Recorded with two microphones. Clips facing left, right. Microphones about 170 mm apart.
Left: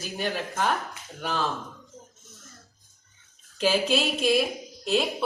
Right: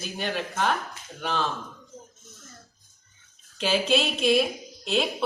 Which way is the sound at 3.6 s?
5° left (ahead or behind).